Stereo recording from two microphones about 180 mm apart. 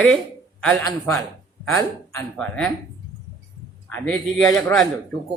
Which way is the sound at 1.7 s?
15° left (ahead or behind).